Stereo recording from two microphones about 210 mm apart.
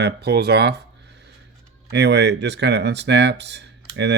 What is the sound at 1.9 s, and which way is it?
Speech, 55° right (ahead or behind).